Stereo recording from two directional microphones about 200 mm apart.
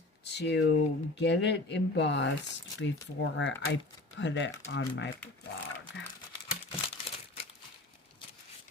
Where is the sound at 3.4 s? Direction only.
65° left (ahead or behind).